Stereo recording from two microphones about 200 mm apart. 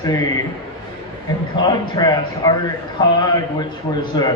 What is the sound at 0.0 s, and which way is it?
Speech, 20° left (ahead or behind).